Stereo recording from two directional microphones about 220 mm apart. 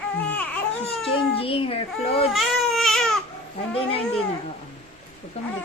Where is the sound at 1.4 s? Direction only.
25° left (ahead or behind).